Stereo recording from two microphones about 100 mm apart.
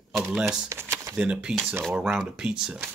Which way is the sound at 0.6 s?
25° right (ahead or behind).